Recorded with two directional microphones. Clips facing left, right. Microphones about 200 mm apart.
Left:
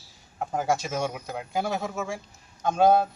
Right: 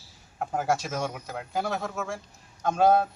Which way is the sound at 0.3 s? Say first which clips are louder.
Left 1 dB; centre (ahead or behind).